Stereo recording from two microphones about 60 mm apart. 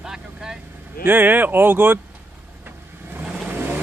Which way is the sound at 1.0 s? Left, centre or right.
Right.